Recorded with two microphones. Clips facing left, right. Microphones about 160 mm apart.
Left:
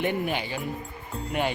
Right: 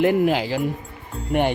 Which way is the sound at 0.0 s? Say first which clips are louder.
Right 9 dB; 85° right.